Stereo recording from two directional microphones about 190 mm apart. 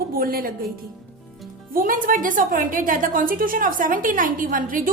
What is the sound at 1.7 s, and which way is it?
A woman's voice, 45° right (ahead or behind).